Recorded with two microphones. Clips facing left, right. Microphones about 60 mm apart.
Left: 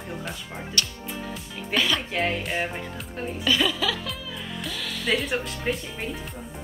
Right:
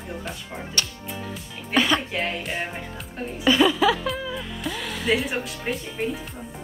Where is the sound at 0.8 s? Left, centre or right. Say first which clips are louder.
Even; right.